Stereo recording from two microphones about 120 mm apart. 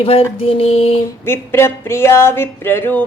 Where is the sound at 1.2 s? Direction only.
20° left (ahead or behind).